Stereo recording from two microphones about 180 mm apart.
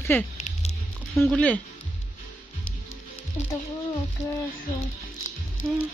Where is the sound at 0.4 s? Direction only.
40° left (ahead or behind).